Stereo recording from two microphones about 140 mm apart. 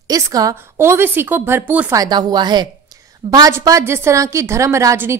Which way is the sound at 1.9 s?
30° right (ahead or behind).